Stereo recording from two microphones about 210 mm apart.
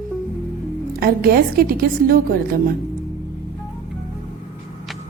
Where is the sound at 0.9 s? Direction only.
45° right (ahead or behind).